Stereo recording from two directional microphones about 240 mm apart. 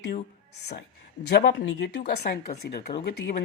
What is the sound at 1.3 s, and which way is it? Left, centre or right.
A woman's voice, left.